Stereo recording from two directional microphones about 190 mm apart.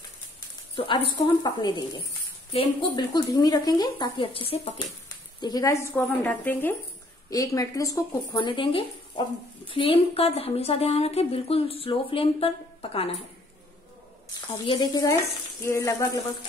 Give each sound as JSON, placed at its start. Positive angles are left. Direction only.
{"t": 0.7, "sound": "speech", "side_deg": 25}
{"t": 5.4, "sound": "a woman's voice", "side_deg": 20}
{"t": 14.7, "sound": "speech", "side_deg": 20}